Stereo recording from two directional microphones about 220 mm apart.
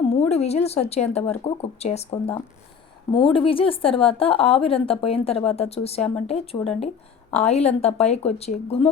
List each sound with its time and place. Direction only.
0.1 s speech: 30° left (ahead or behind)